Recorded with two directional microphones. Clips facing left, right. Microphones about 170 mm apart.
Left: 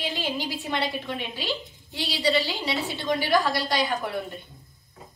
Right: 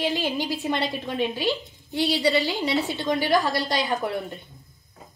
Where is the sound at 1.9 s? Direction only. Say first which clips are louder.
Right 3 dB; 20° right (ahead or behind).